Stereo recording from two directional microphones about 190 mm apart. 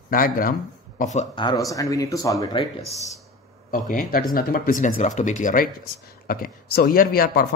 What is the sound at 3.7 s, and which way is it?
Speech, 45° left (ahead or behind).